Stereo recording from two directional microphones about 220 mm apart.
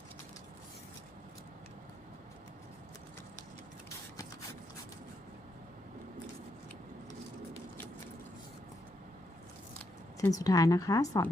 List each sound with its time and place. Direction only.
10.2 s a woman's voice: 15° left (ahead or behind)